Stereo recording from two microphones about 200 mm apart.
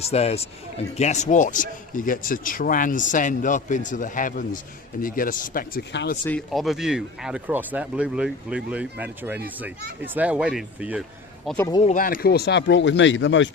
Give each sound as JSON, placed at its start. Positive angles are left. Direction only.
{"t": 0.0, "sound": "speech", "side_deg": 30}
{"t": 6.2, "sound": "speech", "side_deg": 5}
{"t": 11.6, "sound": "speech", "side_deg": 20}
{"t": 11.9, "sound": "speech", "side_deg": 45}